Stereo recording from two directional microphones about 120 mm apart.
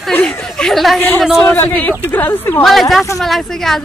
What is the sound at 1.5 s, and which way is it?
Speech, 15° left (ahead or behind).